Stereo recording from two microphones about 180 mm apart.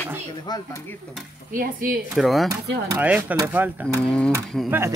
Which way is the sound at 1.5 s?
50° right (ahead or behind).